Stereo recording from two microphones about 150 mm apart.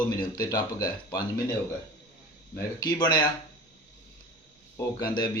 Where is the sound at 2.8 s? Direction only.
30° left (ahead or behind).